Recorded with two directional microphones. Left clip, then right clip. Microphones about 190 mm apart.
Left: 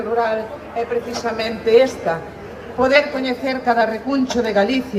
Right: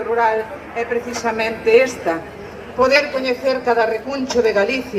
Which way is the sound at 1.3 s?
20° right (ahead or behind).